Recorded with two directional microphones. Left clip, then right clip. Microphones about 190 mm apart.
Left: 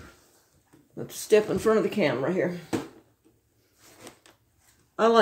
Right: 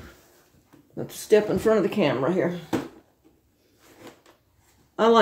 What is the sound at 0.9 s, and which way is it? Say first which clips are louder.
Speech: right 2 dB; 5° left (ahead or behind).